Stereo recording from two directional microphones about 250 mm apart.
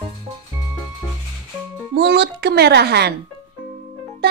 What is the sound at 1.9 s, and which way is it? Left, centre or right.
Speech, right.